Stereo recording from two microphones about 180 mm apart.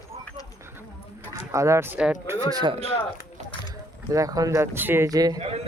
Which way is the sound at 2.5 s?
25° right (ahead or behind).